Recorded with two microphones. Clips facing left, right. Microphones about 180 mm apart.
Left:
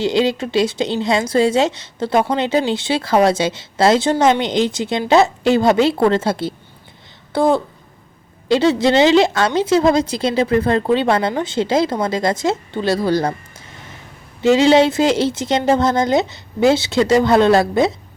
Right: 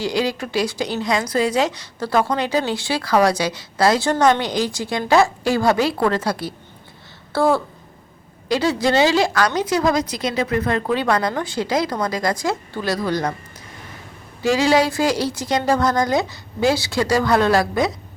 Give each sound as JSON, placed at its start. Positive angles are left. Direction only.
{"t": 0.0, "sound": "a woman's voice", "side_deg": 25}
{"t": 14.4, "sound": "a woman's voice", "side_deg": 25}